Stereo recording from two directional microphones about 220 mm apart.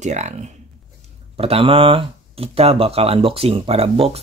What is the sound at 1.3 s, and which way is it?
Speech, 25° right (ahead or behind).